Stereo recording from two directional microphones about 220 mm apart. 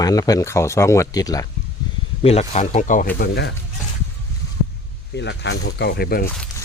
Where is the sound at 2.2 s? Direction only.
30° left (ahead or behind); by 3.5 s 45° left (ahead or behind).